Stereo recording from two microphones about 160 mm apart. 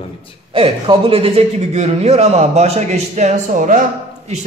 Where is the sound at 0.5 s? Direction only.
35° right (ahead or behind).